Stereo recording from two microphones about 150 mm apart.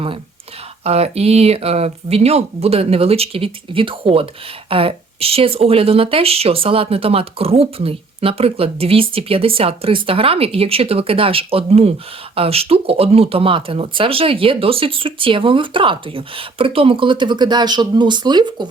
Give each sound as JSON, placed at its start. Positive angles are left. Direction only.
{"t": 0.9, "sound": "speech", "side_deg": -45}